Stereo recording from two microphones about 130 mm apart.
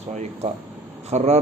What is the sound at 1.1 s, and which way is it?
Speech, 60° right (ahead or behind).